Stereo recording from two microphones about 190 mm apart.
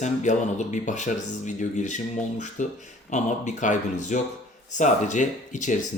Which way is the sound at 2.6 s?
40° left (ahead or behind).